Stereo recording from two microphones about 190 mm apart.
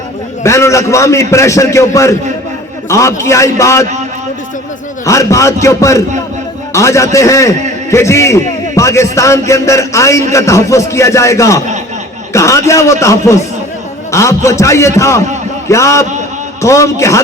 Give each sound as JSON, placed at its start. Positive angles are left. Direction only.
{"t": 0.4, "sound": "a man's voice", "side_deg": 15}
{"t": 5.0, "sound": "a man's voice", "side_deg": 15}